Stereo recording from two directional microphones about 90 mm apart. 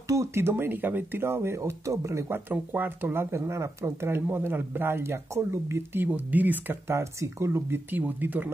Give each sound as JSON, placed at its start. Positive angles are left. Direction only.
{"t": 0.1, "sound": "speech", "side_deg": -35}
{"t": 6.0, "sound": "speech", "side_deg": -20}